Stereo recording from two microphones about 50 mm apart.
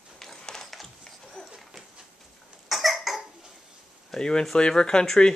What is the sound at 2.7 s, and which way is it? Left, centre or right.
Cough, centre.